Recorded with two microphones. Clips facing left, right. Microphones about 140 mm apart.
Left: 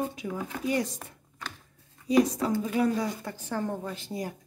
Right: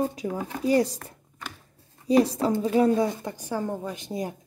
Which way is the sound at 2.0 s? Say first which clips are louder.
Right 3 dB; 30° right (ahead or behind).